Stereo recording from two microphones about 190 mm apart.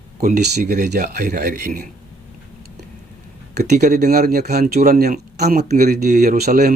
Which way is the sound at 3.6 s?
40° right (ahead or behind).